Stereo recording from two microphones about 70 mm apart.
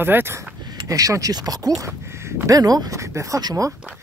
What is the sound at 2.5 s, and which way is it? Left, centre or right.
Speech, right.